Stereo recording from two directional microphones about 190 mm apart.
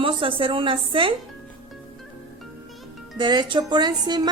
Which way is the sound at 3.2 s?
25° right (ahead or behind).